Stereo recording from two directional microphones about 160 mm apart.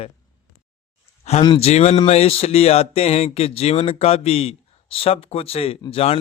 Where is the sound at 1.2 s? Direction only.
45° left (ahead or behind).